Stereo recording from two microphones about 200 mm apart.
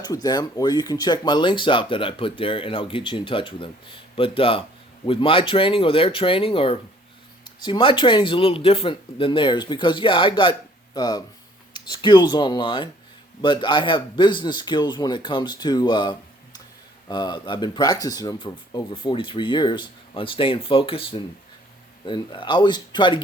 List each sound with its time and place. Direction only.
0.0 s speech: 20° left (ahead or behind)